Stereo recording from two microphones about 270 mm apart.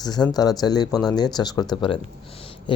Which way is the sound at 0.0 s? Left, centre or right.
Centre.